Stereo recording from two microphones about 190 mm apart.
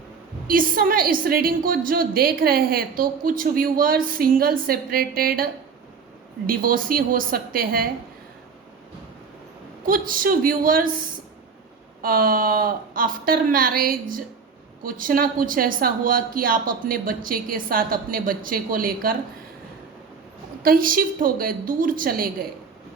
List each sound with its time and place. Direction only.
0.4 s a woman's voice: 45° right (ahead or behind)
6.5 s a woman's voice: 50° right (ahead or behind)
9.8 s a woman's voice: 45° right (ahead or behind)
12.0 s a woman's voice: 50° right (ahead or behind)
20.6 s a woman's voice: 50° right (ahead or behind)